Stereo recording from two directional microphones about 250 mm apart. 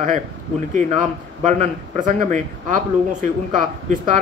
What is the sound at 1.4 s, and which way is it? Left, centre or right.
Speech, right.